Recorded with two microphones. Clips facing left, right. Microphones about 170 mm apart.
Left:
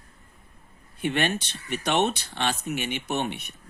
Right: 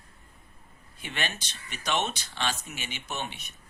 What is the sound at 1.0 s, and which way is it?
Speech, 55° left (ahead or behind).